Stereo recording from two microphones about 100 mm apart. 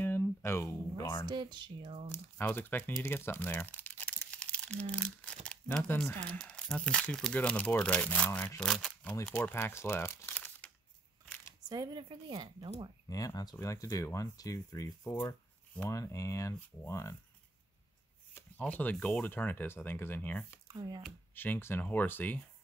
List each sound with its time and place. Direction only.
0.0 s a sound: 20° left (ahead or behind)
1.2 s speech: 50° right (ahead or behind)
2.0 s speech: 30° left (ahead or behind)
2.4 s speech: 20° left (ahead or behind)
8.5 s speech: centre (ahead or behind)
9.4 s speech: 20° left (ahead or behind)
11.7 s speech: 45° right (ahead or behind)
13.1 s speech: 40° left (ahead or behind)
18.6 s speech: 15° left (ahead or behind)
20.6 s speech: 40° right (ahead or behind)
21.4 s speech: 20° left (ahead or behind)